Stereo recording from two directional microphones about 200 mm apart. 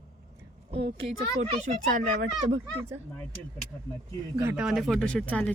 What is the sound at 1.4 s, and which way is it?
Speech, 35° right (ahead or behind).